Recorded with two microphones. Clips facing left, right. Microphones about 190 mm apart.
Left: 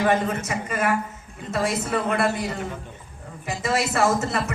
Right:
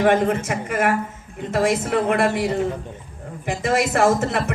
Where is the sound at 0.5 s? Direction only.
60° right (ahead or behind).